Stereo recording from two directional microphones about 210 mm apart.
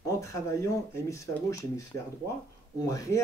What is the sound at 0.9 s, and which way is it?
Speech, 15° left (ahead or behind).